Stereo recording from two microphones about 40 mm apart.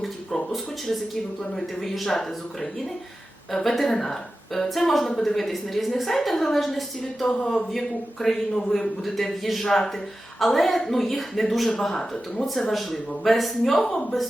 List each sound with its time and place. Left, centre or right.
0.0 s a woman's voice: centre
12.5 s speech: centre